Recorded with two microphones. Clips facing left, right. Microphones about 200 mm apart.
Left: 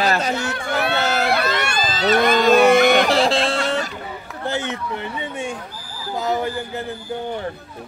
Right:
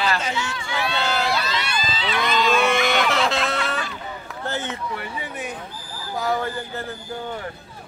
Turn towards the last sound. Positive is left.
turn(degrees=15)  # may be behind; listen again after turning